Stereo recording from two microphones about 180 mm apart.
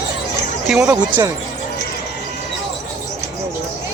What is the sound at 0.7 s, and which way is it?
Speech, 10° right (ahead or behind).